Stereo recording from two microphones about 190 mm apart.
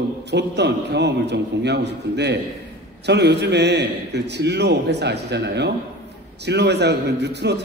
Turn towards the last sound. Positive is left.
turn(degrees=-65)  # may be behind; listen again after turning